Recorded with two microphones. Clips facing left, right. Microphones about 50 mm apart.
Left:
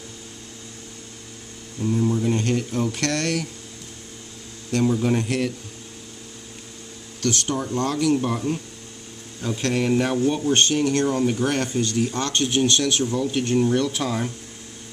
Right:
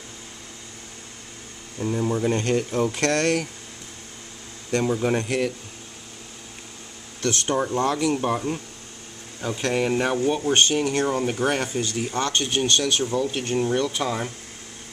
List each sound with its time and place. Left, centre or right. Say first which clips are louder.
1.8 s speech: left 2 dB; right
4.8 s speech: left 3 dB; centre
7.2 s speech: right 1 dB; right; by 14.3 s centre